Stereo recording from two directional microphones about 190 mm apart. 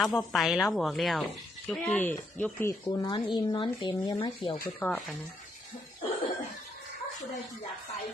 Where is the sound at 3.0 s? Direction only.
20° left (ahead or behind).